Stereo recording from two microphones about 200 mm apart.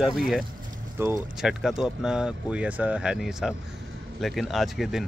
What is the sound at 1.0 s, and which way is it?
Speech, 10° right (ahead or behind).